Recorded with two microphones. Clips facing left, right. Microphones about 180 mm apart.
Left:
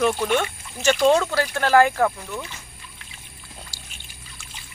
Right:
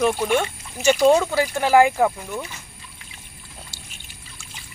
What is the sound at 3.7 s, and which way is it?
Pour, 20° right (ahead or behind).